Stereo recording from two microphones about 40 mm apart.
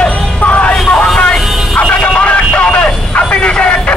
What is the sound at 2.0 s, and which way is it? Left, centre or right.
Vehicle, left.